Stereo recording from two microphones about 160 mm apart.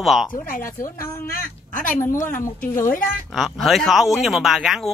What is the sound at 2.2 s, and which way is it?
Speech, 60° left (ahead or behind).